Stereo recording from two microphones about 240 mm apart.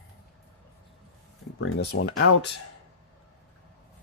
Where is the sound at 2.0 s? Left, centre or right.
Left.